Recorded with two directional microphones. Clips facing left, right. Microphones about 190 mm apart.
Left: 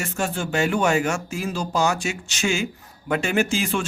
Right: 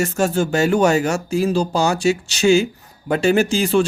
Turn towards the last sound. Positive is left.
turn(degrees=-35)  # may be behind; listen again after turning